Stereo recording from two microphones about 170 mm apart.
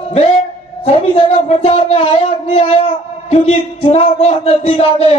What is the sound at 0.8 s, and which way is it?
Speech, 35° left (ahead or behind).